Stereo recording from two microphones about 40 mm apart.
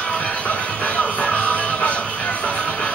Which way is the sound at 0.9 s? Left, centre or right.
Left.